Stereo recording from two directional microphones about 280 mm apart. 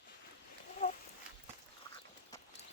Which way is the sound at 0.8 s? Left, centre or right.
Left.